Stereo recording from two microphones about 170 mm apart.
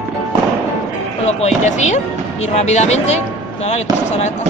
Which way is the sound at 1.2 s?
40° left (ahead or behind).